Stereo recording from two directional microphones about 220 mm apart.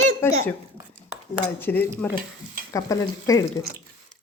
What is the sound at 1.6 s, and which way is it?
Speech, 10° left (ahead or behind).